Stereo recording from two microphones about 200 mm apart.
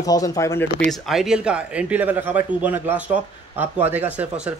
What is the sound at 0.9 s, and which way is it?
Speech, centre (ahead or behind).